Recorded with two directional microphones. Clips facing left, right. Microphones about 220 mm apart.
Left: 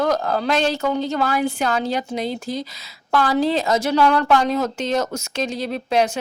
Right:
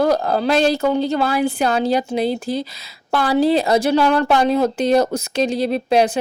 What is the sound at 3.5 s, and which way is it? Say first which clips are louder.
Speech: right 3 dB; 35° right (ahead or behind).